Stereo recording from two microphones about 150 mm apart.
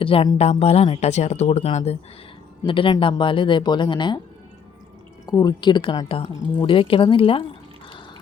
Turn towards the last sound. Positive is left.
turn(degrees=35)  # may be behind; listen again after turning